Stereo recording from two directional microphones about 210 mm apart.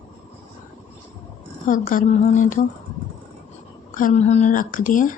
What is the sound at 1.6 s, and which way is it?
Speech, 40° left (ahead or behind).